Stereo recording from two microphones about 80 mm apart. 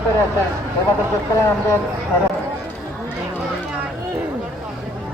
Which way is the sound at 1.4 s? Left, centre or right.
Left.